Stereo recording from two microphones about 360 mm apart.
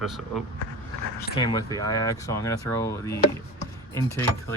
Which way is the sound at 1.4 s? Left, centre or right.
Centre.